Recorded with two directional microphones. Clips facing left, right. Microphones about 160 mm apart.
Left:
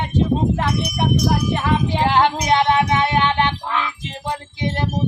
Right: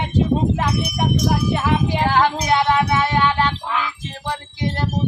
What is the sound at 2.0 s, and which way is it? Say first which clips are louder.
Female singing: left 2 dB; 20° left (ahead or behind).